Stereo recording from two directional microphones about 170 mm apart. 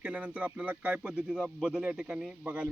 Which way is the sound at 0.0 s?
5° right (ahead or behind).